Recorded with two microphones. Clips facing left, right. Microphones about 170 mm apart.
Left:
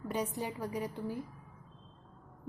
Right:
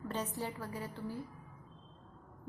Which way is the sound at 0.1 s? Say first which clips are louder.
Left 4 dB; 10° left (ahead or behind).